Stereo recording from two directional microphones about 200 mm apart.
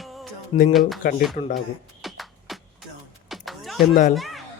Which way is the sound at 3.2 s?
Centre (ahead or behind).